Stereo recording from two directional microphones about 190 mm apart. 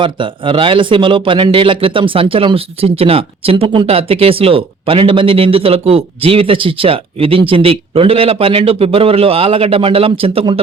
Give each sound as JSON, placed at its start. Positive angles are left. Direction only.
{"t": 0.0, "sound": "speech", "side_deg": -25}